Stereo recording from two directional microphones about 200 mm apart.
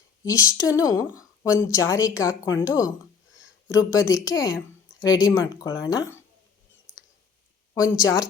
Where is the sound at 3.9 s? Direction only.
20° left (ahead or behind).